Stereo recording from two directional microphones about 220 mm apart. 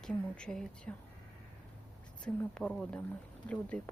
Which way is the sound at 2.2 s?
5° left (ahead or behind).